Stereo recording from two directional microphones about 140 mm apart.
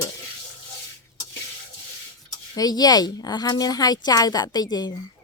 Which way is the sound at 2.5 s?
30° left (ahead or behind).